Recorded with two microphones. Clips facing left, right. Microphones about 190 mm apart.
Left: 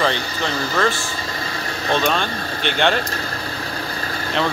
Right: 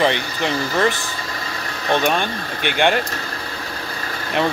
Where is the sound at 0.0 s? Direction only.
15° right (ahead or behind).